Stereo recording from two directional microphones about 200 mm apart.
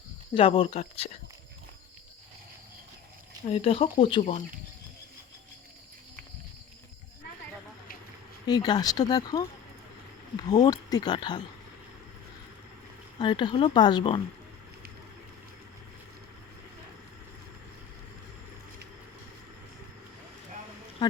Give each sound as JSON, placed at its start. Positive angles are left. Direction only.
{"t": 0.3, "sound": "speech", "side_deg": 30}
{"t": 3.5, "sound": "speech", "side_deg": 30}
{"t": 8.4, "sound": "speech", "side_deg": 20}
{"t": 10.5, "sound": "speech", "side_deg": 20}
{"t": 13.1, "sound": "speech", "side_deg": 20}